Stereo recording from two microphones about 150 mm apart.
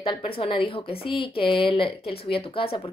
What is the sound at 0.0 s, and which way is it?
A woman's voice, 35° left (ahead or behind).